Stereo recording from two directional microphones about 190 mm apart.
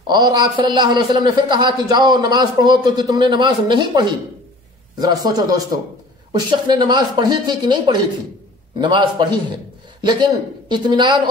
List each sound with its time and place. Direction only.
0.0 s a man's voice: 25° right (ahead or behind)